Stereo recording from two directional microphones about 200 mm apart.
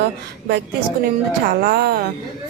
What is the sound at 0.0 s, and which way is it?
A woman's voice, 55° right (ahead or behind).